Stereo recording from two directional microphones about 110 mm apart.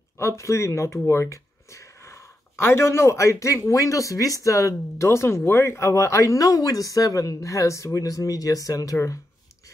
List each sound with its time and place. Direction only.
0.2 s speech: 25° left (ahead or behind)